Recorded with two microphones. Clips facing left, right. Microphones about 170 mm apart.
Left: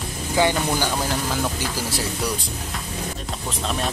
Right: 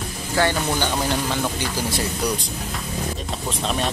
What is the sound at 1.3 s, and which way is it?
Speech, 5° left (ahead or behind).